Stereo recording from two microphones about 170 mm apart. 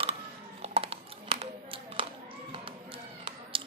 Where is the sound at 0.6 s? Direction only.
35° right (ahead or behind).